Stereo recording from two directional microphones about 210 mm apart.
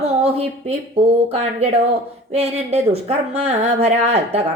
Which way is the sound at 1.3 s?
30° right (ahead or behind).